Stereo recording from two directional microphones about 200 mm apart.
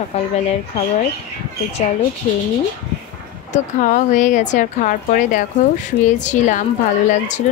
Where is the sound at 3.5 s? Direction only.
40° left (ahead or behind).